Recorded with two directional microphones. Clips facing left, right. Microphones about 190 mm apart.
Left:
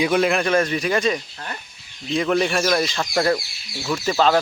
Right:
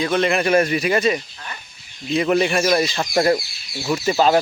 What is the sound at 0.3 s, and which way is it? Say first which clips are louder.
Speech: right 2 dB; 5° right (ahead or behind).